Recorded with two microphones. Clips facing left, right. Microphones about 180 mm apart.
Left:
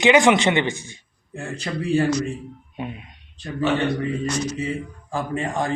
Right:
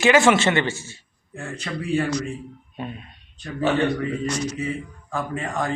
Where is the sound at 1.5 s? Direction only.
30° left (ahead or behind).